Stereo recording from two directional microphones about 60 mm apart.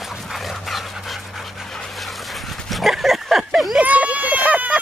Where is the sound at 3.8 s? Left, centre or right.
Right.